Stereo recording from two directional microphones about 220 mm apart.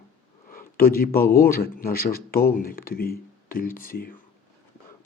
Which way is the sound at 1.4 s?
45° left (ahead or behind).